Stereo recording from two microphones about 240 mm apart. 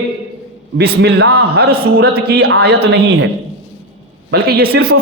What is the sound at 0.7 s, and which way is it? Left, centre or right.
A man's voice, right.